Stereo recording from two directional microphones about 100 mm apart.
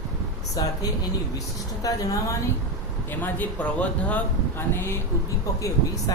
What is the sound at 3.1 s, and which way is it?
Speech, 20° left (ahead or behind).